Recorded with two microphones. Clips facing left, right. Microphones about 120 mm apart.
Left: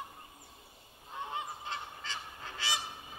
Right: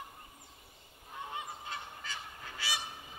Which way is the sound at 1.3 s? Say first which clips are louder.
Left 2 dB; 30° left (ahead or behind).